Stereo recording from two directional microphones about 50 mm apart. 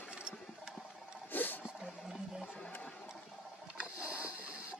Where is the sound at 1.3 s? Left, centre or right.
Left.